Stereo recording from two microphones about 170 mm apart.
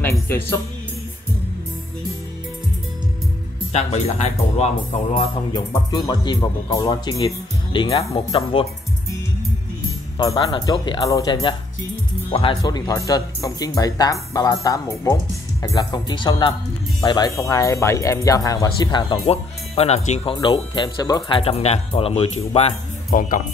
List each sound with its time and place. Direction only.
0.0 s music: 15° left (ahead or behind)
3.7 s speech: 40° left (ahead or behind)
5.5 s speech: 20° left (ahead or behind)
10.1 s speech: 25° left (ahead or behind); by 20.3 s 40° left (ahead or behind)
20.3 s speech: 25° left (ahead or behind)
23.0 s speech: 55° left (ahead or behind)